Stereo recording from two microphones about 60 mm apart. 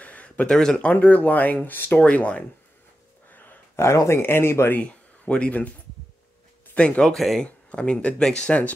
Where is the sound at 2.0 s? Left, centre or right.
Left.